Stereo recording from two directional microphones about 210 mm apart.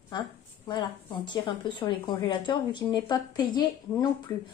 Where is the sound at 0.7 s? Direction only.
20° left (ahead or behind).